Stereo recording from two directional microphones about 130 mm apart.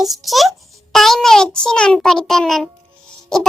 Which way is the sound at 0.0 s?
Centre (ahead or behind).